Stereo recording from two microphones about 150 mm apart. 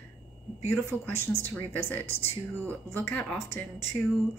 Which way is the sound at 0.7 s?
20° left (ahead or behind).